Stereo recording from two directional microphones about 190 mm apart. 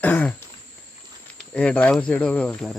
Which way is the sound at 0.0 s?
10° left (ahead or behind).